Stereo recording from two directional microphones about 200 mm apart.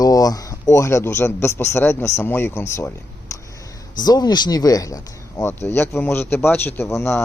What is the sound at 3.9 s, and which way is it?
Speech, 20° left (ahead or behind).